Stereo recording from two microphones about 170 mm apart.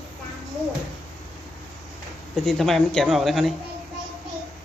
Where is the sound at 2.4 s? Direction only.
Centre (ahead or behind).